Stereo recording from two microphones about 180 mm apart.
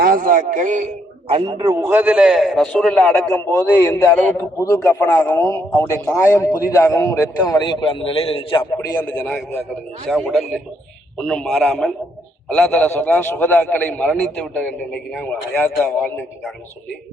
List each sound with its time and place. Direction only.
0.0 s a man's voice: 50° right (ahead or behind); by 9.0 s 25° left (ahead or behind)
9.0 s a man's voice: 5° left (ahead or behind)